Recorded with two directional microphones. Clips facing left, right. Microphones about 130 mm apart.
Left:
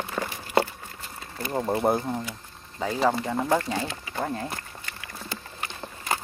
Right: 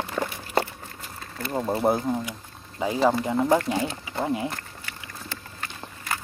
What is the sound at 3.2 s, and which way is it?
Speech, 10° right (ahead or behind).